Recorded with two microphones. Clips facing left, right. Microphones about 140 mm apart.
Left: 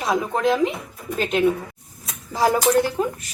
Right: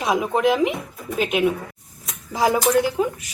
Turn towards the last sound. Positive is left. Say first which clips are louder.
# even
turn(degrees=-5)  # may be behind; listen again after turning